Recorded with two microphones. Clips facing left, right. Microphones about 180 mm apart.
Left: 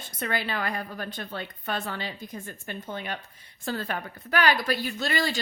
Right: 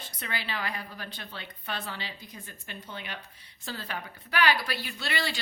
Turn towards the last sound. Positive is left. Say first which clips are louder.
# left 5 dB
turn(degrees=45)  # may be behind; listen again after turning